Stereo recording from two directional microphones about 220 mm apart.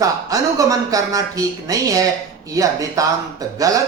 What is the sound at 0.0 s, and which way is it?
Speech, 15° right (ahead or behind).